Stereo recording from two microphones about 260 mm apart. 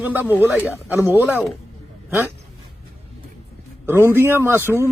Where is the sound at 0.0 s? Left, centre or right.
Centre.